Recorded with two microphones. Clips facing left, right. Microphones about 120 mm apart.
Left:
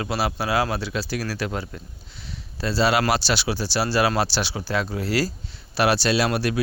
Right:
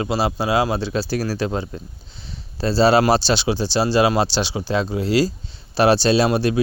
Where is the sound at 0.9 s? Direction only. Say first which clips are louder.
Right 5 dB; 35° right (ahead or behind).